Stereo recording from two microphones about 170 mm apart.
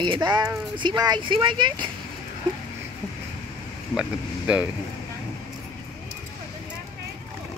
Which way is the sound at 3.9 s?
5° right (ahead or behind).